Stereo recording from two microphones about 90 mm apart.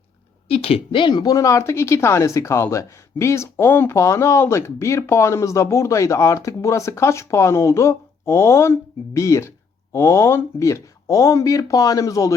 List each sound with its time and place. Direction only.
0.4 s speech: 90° left
0.9 s speech: 55° left (ahead or behind); by 12.3 s 40° left (ahead or behind)